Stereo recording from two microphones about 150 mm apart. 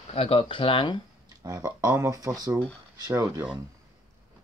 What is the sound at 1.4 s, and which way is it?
Speech, 25° right (ahead or behind).